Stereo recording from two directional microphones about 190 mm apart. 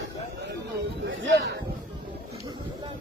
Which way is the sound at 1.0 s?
80° right.